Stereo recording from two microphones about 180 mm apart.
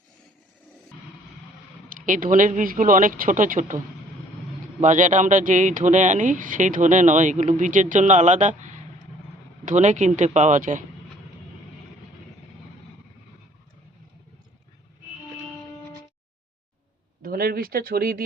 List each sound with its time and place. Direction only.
1.9 s a man's voice: 45° right (ahead or behind)
4.8 s a man's voice: 45° right (ahead or behind)
17.2 s a sound: 55° right (ahead or behind)